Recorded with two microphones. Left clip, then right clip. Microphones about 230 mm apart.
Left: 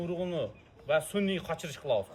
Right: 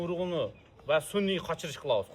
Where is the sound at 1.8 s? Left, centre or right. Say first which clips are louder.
Right 1 dB; right.